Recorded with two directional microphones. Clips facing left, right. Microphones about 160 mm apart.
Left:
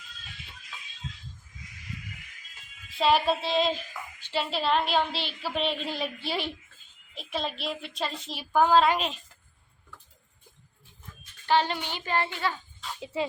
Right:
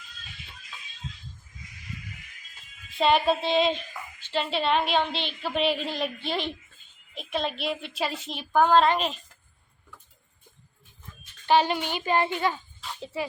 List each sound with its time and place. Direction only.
3.0 s a woman's voice: centre (ahead or behind)
4.2 s a woman's voice: 10° left (ahead or behind)
4.5 s a woman's voice: centre (ahead or behind)
8.3 s a woman's voice: 5° left (ahead or behind)
11.4 s a child's voice: 15° right (ahead or behind)